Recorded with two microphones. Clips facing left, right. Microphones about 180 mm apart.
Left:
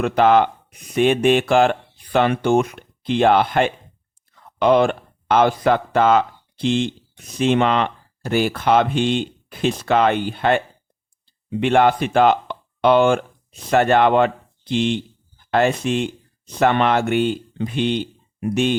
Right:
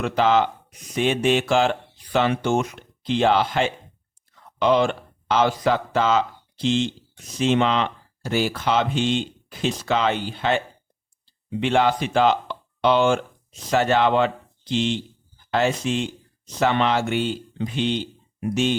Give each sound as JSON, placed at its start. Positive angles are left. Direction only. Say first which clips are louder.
{"t": 0.0, "sound": "speech", "louder": "left 4 dB", "side_deg": 55}
{"t": 11.6, "sound": "speech", "louder": "left 4 dB", "side_deg": 55}